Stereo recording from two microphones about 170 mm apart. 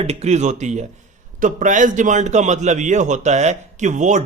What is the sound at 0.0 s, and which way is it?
A man's voice, 40° right (ahead or behind).